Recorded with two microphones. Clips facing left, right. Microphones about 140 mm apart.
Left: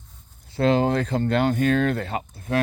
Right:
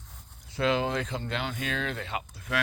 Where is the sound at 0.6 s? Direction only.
40° left (ahead or behind).